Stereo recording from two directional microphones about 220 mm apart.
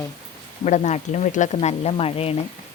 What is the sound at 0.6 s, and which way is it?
Speech, 35° left (ahead or behind).